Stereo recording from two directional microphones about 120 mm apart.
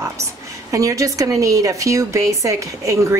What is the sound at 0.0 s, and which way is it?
A woman's voice, 25° right (ahead or behind).